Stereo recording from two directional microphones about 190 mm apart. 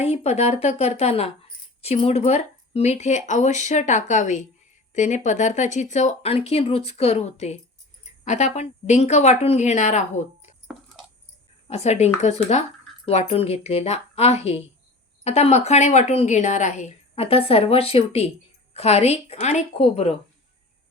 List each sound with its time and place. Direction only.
0.0 s speech: 35° left (ahead or behind)
11.7 s speech: 35° left (ahead or behind)